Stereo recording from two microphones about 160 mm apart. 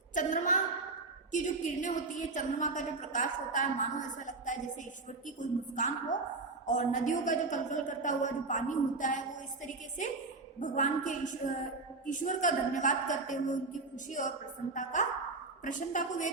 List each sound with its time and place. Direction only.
0.1 s a woman's voice: 55° left (ahead or behind)
10.6 s a woman's voice: 55° left (ahead or behind)